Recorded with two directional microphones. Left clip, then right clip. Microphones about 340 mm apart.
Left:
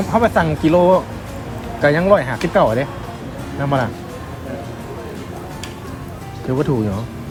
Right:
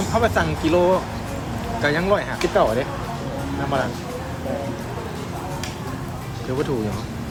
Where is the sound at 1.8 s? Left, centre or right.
Centre.